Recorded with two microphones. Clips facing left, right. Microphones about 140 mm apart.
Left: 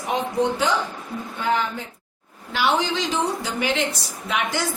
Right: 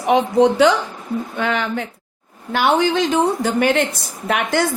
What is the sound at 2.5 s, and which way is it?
A woman's voice, 55° right (ahead or behind).